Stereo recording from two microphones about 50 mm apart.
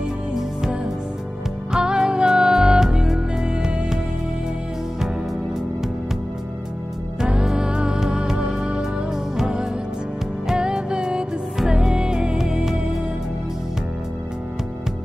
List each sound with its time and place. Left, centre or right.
0.3 s music: centre
7.2 s music: centre